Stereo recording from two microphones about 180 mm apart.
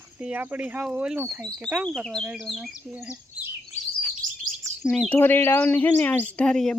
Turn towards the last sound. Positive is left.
turn(degrees=5)  # may be behind; listen again after turning